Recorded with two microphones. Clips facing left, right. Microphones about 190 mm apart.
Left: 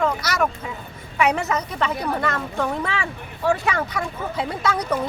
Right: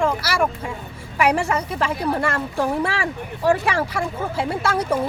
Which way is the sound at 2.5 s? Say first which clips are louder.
Right 3 dB; 30° right (ahead or behind).